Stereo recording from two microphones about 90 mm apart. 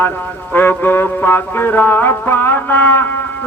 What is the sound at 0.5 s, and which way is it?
Music, 20° left (ahead or behind).